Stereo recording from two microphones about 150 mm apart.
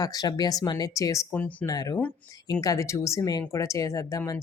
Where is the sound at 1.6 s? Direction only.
25° left (ahead or behind).